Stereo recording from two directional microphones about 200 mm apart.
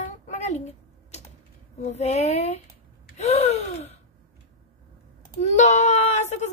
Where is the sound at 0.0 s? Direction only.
35° left (ahead or behind).